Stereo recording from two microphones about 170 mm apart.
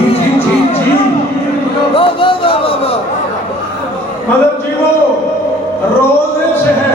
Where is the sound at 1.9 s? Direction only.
30° left (ahead or behind).